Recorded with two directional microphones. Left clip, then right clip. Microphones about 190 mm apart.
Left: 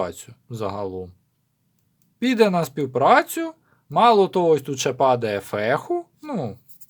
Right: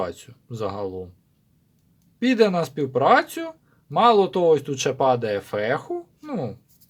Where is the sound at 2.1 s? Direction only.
25° left (ahead or behind).